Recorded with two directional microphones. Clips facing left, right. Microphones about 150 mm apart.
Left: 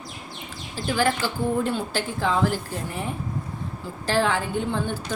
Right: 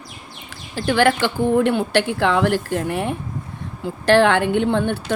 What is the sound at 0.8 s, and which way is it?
Speech, 75° right (ahead or behind).